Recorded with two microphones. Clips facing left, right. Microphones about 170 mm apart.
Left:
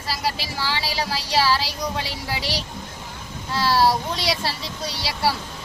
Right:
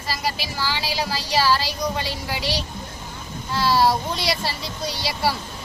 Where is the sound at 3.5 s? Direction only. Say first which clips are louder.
Even; centre (ahead or behind).